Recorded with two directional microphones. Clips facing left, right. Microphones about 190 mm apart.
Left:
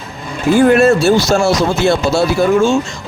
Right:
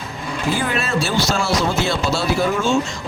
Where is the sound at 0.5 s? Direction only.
50° left (ahead or behind).